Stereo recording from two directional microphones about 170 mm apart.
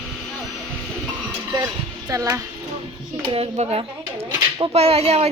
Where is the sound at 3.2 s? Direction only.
35° right (ahead or behind).